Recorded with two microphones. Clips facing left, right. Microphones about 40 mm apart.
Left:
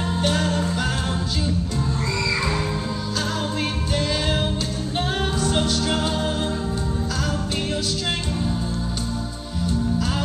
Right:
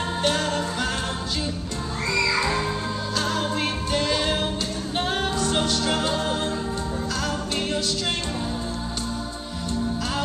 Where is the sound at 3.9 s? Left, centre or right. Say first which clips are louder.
Right 1 dB; centre.